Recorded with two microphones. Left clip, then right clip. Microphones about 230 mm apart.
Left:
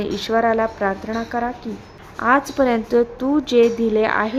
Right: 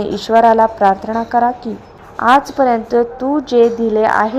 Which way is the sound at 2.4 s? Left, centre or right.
Left.